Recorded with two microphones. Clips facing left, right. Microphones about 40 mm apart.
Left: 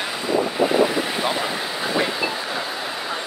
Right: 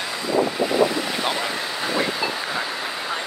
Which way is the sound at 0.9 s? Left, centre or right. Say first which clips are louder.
Left 2 dB; centre.